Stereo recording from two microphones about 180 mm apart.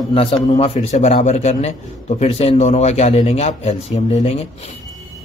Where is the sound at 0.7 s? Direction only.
40° left (ahead or behind).